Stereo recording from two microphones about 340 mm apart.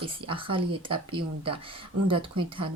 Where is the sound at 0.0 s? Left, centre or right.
Centre.